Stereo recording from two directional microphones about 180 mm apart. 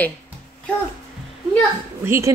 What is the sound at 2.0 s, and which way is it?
Speech, 15° right (ahead or behind).